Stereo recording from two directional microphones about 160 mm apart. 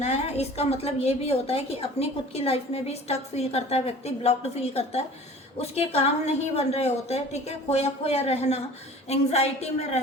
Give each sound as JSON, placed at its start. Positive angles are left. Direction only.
{"t": 0.0, "sound": "a woman's voice", "side_deg": 40}